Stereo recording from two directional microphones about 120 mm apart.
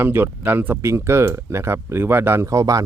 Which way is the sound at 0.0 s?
15° right (ahead or behind).